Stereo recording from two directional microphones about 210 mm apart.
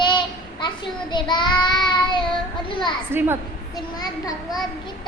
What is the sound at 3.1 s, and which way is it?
Speech, 10° right (ahead or behind).